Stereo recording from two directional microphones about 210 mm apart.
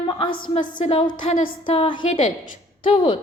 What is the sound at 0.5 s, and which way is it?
A woman's voice, 35° left (ahead or behind).